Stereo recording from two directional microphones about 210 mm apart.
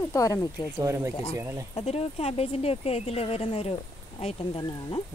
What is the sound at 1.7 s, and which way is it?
Speech, 30° left (ahead or behind).